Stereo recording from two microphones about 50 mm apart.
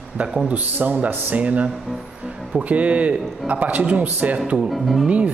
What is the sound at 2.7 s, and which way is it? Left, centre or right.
A man's voice, right.